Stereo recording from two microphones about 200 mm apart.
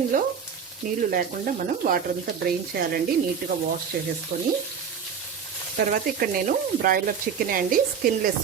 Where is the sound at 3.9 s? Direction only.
45° right (ahead or behind).